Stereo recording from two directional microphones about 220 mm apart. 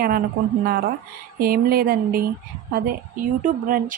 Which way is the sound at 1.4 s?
40° right (ahead or behind).